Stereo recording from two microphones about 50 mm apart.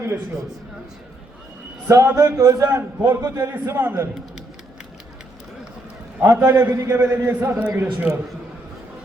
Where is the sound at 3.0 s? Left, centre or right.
Right.